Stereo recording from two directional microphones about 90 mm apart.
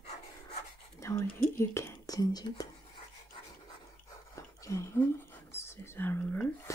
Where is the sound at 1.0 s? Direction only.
30° left (ahead or behind).